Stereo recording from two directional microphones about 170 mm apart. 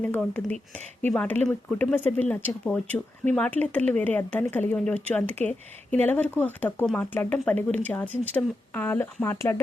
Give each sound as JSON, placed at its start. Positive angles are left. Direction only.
{"t": 0.0, "sound": "speech", "side_deg": 10}